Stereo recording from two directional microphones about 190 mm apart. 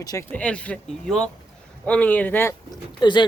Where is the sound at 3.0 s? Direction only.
25° left (ahead or behind).